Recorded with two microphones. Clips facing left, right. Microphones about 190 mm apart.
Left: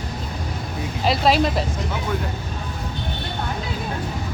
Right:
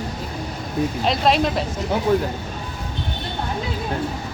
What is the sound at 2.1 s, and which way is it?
Speech, 35° right (ahead or behind).